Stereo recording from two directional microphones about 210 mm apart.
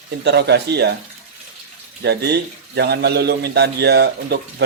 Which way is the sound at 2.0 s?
50° right (ahead or behind).